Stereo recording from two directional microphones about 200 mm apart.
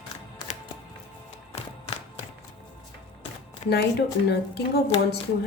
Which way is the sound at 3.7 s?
55° left (ahead or behind).